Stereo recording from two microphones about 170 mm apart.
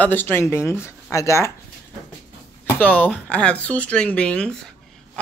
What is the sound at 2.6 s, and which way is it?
Speech, 10° left (ahead or behind).